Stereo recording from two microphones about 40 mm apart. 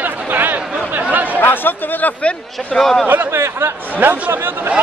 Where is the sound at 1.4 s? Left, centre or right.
Left.